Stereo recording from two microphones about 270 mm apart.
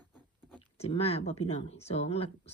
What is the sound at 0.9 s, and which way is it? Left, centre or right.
Speech, left.